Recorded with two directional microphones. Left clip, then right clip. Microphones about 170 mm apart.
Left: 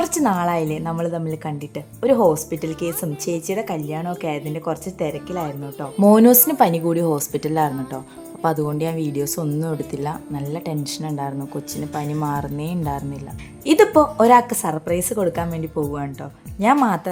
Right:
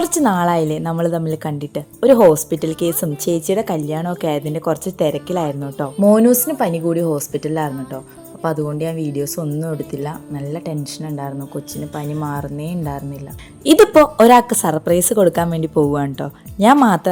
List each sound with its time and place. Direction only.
0.0 s a woman's voice: 20° right (ahead or behind)
6.0 s a woman's voice: centre (ahead or behind)
13.7 s a woman's voice: 25° right (ahead or behind)